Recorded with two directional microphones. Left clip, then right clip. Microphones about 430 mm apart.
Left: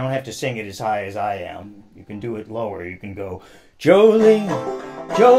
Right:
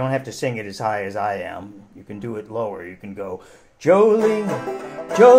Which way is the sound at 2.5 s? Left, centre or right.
Left.